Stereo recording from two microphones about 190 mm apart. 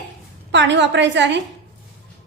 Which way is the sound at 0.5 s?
65° right (ahead or behind).